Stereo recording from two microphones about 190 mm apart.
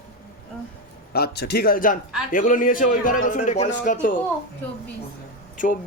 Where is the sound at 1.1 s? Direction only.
55° left (ahead or behind); by 3.7 s 40° left (ahead or behind).